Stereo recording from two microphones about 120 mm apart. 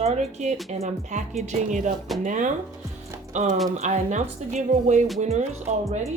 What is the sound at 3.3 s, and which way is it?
Speech, 85° right.